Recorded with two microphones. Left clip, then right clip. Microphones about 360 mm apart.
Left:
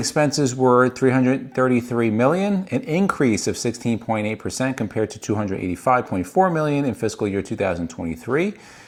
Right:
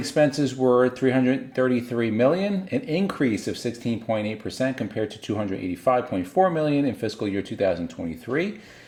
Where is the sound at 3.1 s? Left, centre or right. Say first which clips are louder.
Left 5 dB; left.